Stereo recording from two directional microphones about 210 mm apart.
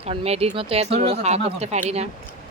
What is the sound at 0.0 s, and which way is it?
Speech, 30° right (ahead or behind).